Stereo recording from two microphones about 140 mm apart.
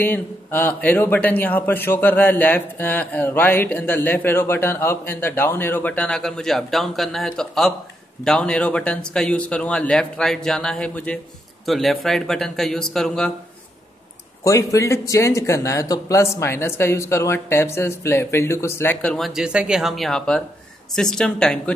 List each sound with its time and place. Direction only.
0.0 s a man's voice: 15° left (ahead or behind)
14.4 s a man's voice: 20° left (ahead or behind); by 21.7 s 5° left (ahead or behind)